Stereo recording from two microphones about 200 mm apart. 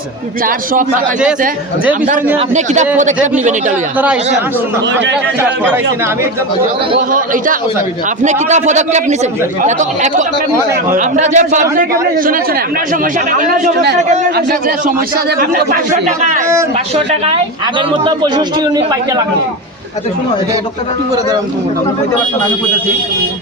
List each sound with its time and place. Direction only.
0.4 s speech: 45° right (ahead or behind)
3.9 s speech: 5° right (ahead or behind)
5.4 s speech: 10° right (ahead or behind)
8.2 s a man's voice: 35° right (ahead or behind)
15.4 s speech: 45° right (ahead or behind)
17.7 s a man's voice: 20° right (ahead or behind)